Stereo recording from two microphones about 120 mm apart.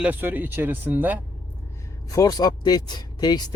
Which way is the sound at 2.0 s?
30° left (ahead or behind).